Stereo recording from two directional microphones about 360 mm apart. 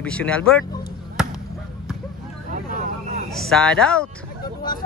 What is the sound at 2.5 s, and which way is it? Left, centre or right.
Vehicle, right.